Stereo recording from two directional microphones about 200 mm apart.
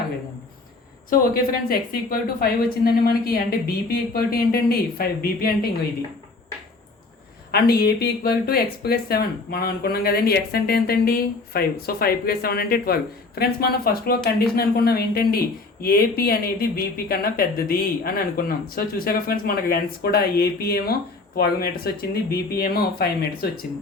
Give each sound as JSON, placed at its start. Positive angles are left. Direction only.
{"t": 1.1, "sound": "speech", "side_deg": 45}
{"t": 7.5, "sound": "speech", "side_deg": 50}